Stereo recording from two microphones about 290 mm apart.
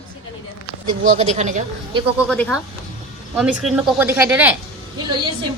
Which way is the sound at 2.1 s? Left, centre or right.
Centre.